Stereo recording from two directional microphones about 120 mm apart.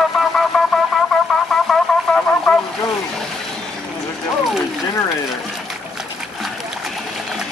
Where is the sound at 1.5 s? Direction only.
Centre (ahead or behind).